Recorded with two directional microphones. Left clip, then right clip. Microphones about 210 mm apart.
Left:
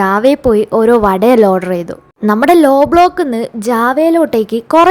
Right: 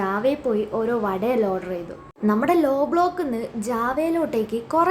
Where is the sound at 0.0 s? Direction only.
50° left (ahead or behind).